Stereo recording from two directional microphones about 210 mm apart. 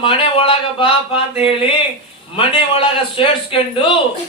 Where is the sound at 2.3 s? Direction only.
25° left (ahead or behind).